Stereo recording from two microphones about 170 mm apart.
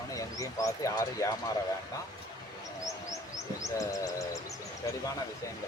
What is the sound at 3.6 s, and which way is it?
Bird, 20° left (ahead or behind).